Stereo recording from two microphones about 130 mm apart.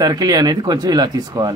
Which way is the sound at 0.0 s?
30° right (ahead or behind).